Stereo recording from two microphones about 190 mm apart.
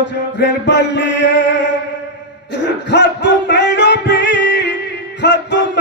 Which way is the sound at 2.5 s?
70° left (ahead or behind).